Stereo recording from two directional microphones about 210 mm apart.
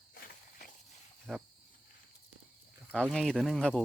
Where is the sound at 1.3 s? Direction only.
Centre (ahead or behind).